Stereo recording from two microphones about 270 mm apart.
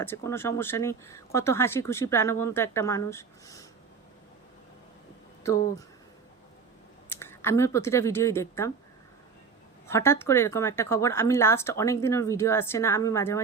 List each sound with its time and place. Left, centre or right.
0.0 s speech: centre
7.1 s speech: centre
9.8 s speech: centre